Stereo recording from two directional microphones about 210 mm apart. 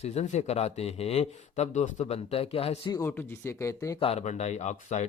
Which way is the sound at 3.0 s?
10° left (ahead or behind).